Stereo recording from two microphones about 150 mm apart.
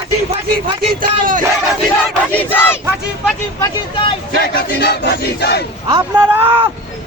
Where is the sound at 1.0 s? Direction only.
65° right (ahead or behind).